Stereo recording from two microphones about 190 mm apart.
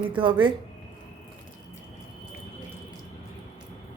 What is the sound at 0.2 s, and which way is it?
Speech, 25° right (ahead or behind).